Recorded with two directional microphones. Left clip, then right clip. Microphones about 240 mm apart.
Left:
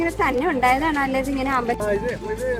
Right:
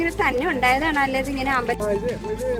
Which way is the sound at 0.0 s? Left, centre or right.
Left.